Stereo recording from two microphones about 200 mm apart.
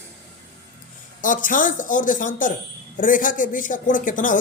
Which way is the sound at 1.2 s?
40° left (ahead or behind).